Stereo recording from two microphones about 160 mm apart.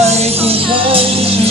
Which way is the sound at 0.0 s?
35° right (ahead or behind).